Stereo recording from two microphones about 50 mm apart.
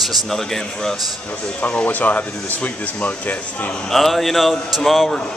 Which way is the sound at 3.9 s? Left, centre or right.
Centre.